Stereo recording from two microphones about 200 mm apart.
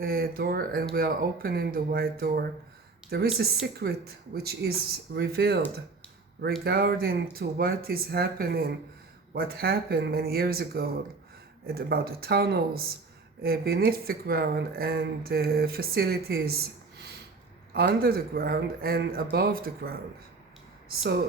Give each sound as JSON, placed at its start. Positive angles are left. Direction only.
{"t": 0.0, "sound": "speech", "side_deg": -50}
{"t": 6.7, "sound": "speech", "side_deg": -50}
{"t": 17.7, "sound": "speech", "side_deg": -50}